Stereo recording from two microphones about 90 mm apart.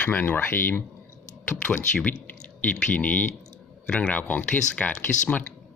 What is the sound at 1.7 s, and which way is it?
Speech, 10° left (ahead or behind).